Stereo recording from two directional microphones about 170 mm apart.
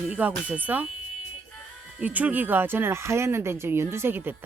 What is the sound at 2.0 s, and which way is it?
Speech, 10° right (ahead or behind).